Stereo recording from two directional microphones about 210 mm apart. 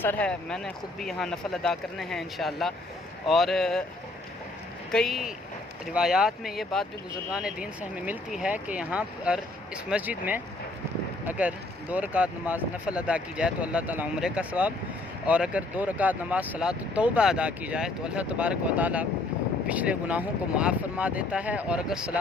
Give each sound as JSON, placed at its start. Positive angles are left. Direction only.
{"t": 0.0, "sound": "speech", "side_deg": 5}
{"t": 4.9, "sound": "speech", "side_deg": 0}